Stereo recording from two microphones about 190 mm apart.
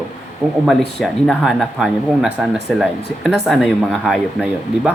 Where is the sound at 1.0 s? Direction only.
Centre (ahead or behind).